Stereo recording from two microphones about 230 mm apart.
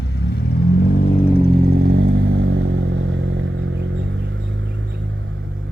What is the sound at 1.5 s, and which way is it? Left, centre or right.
Vehicle, right.